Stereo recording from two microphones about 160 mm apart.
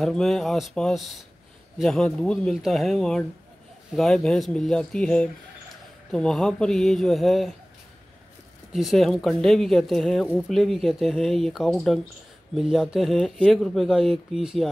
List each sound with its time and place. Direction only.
0.0 s speech: centre (ahead or behind)
8.7 s speech: centre (ahead or behind)